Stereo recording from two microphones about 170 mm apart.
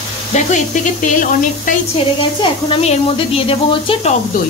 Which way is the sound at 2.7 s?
35° left (ahead or behind).